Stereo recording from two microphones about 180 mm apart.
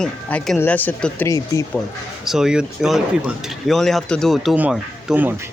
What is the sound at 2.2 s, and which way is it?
Speech, centre (ahead or behind).